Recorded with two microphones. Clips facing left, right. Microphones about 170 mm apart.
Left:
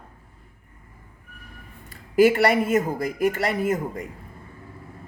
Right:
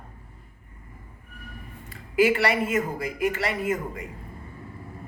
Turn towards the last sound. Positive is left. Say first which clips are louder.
# left 3 dB
turn(degrees=40)  # may be behind; listen again after turning